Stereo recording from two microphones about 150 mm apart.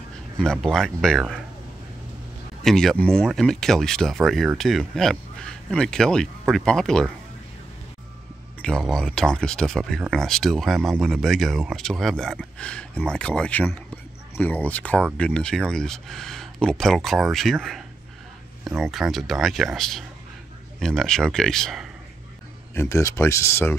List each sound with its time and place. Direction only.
0.4 s speech: 5° left (ahead or behind)
2.6 s speech: centre (ahead or behind)
8.6 s speech: 5° left (ahead or behind)
22.8 s speech: 20° left (ahead or behind)